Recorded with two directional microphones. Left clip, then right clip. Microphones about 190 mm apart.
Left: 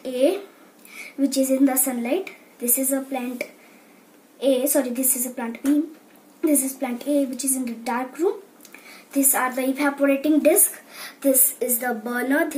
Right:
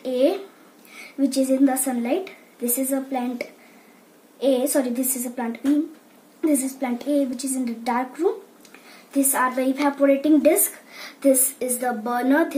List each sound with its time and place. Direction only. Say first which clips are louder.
0.0 s a woman's voice: even; 5° right (ahead or behind)
12.0 s a woman's voice: right 3 dB; 35° right (ahead or behind)